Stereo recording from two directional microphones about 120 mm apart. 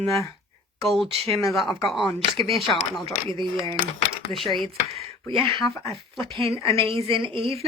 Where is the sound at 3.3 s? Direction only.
45° right (ahead or behind).